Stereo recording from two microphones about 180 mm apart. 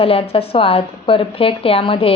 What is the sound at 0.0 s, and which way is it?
Speech, 30° left (ahead or behind).